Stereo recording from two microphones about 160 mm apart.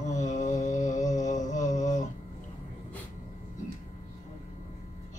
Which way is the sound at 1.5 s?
50° left (ahead or behind).